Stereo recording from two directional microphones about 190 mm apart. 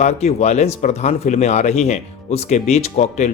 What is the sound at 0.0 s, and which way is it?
Speech, 35° left (ahead or behind).